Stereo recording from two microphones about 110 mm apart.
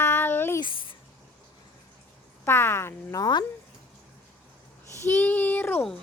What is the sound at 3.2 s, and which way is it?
Speech, 40° left (ahead or behind).